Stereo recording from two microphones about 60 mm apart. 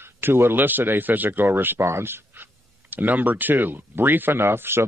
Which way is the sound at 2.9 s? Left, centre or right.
Right.